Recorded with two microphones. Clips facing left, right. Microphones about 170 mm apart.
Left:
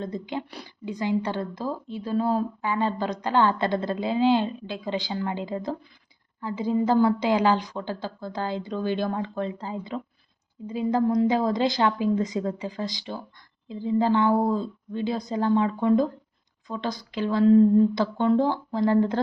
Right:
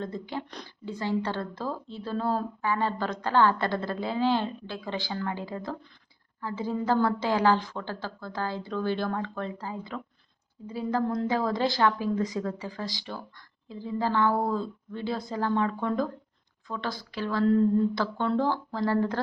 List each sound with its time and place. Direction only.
0.0 s a woman's voice: 20° left (ahead or behind)